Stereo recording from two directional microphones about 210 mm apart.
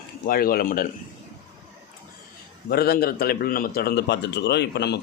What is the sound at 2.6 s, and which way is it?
Speech, 45° left (ahead or behind).